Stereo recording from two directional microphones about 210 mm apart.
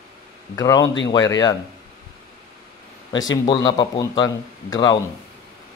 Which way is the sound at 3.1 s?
20° left (ahead or behind).